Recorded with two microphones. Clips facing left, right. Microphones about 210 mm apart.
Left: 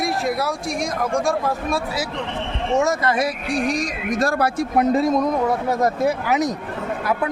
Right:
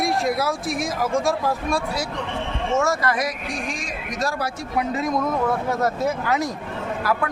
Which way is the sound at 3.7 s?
40° left (ahead or behind).